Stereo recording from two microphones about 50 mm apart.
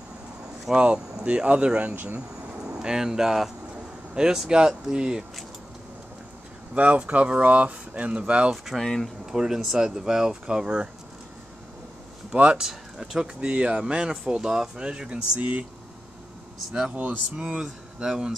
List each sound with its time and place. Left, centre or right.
0.7 s speech: centre
1.2 s speech: right
1.8 s speech: right
2.6 s speech: centre
6.7 s speech: right
8.7 s speech: centre
9.2 s speech: centre
12.3 s speech: centre
12.6 s speech: centre
13.2 s speech: centre
14.9 s speech: right
16.9 s speech: right